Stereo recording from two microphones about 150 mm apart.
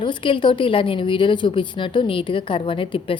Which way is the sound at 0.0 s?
35° left (ahead or behind).